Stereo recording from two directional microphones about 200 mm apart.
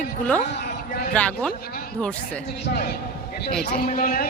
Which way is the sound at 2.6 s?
55° left (ahead or behind).